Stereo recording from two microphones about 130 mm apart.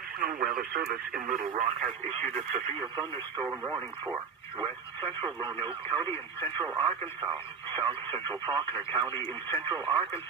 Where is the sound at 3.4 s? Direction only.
20° right (ahead or behind).